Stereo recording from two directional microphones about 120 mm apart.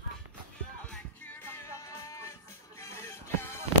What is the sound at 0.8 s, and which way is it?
Music, 5° left (ahead or behind).